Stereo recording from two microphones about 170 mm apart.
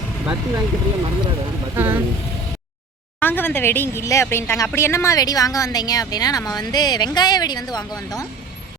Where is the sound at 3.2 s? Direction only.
10° left (ahead or behind).